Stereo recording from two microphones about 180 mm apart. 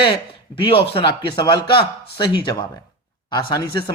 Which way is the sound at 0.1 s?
30° left (ahead or behind).